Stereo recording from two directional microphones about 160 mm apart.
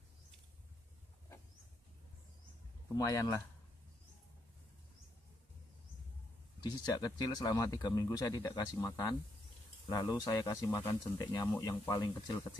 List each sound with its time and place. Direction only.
3.0 s speech: 20° left (ahead or behind)
6.6 s speech: 25° left (ahead or behind)